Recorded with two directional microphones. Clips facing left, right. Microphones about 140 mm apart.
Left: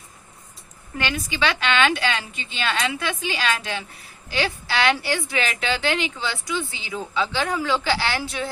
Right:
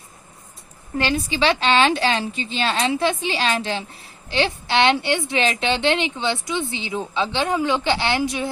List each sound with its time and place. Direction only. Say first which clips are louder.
0.9 s a woman's voice: right 5 dB; 30° right (ahead or behind)